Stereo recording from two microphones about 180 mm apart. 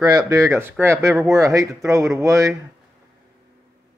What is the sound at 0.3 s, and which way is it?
Speech, 15° right (ahead or behind).